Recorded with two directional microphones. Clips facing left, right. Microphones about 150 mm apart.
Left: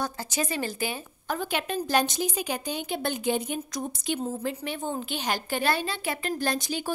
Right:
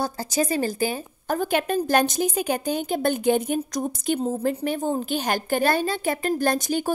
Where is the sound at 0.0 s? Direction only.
35° right (ahead or behind).